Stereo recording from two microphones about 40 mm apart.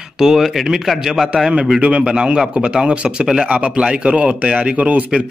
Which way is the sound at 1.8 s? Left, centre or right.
Right.